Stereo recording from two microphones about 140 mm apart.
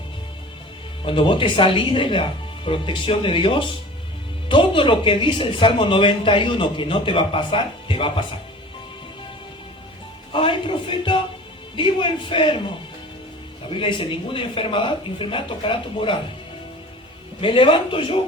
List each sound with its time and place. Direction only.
1.0 s speech: 35° left (ahead or behind)
10.3 s speech: 40° left (ahead or behind)
13.7 s speech: 40° left (ahead or behind)
17.4 s speech: 40° left (ahead or behind)